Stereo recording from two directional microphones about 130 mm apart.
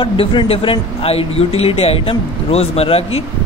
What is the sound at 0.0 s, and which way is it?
Speech, 40° left (ahead or behind).